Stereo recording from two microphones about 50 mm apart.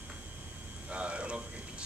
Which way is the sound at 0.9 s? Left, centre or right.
Right.